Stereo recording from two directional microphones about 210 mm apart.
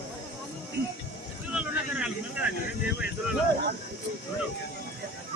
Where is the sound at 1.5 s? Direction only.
5° right (ahead or behind).